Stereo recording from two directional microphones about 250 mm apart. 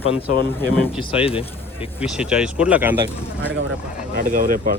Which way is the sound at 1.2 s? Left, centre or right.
Left.